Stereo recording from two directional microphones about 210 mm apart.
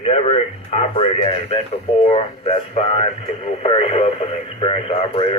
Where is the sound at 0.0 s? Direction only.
30° left (ahead or behind).